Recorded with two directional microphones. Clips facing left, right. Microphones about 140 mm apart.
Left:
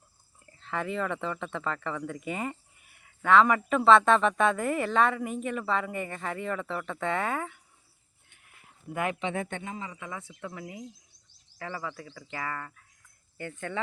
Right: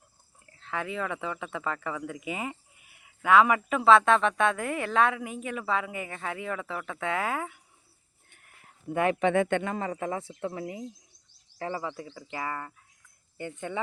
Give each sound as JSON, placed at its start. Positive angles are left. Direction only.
{"t": 0.5, "sound": "speech", "side_deg": 0}
{"t": 8.9, "sound": "speech", "side_deg": -30}
{"t": 9.3, "sound": "speech", "side_deg": -80}
{"t": 10.1, "sound": "speech", "side_deg": -30}
{"t": 12.2, "sound": "cricket", "side_deg": -20}
{"t": 13.3, "sound": "speech", "side_deg": -20}